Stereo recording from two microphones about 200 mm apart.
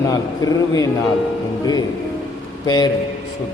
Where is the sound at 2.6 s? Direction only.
20° left (ahead or behind).